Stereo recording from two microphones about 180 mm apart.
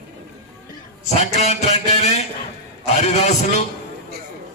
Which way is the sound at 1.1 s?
40° left (ahead or behind).